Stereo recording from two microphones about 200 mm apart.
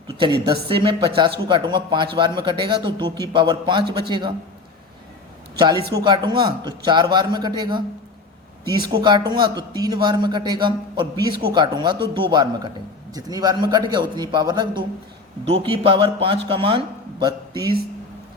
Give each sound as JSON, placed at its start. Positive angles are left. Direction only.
{"t": 0.2, "sound": "speech", "side_deg": -25}
{"t": 5.5, "sound": "speech", "side_deg": -20}
{"t": 8.8, "sound": "speech", "side_deg": -25}